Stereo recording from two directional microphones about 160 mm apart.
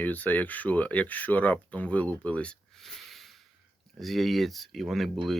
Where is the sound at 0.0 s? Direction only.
10° left (ahead or behind).